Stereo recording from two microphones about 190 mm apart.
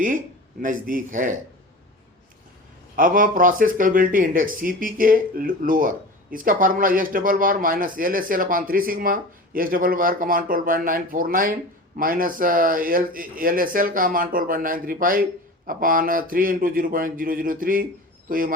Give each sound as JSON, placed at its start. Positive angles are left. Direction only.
{"t": 0.6, "sound": "speech", "side_deg": -45}
{"t": 2.9, "sound": "a man's voice", "side_deg": -45}